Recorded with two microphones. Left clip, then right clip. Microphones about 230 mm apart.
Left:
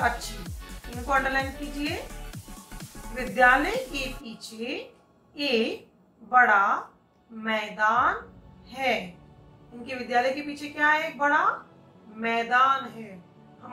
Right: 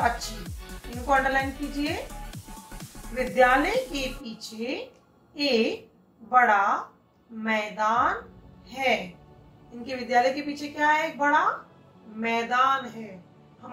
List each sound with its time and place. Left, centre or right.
0.1 s music: centre
1.1 s a woman's voice: centre
2.0 s music: centre
3.3 s a woman's voice: centre